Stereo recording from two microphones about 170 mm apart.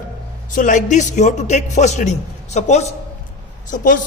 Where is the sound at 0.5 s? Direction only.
50° left (ahead or behind).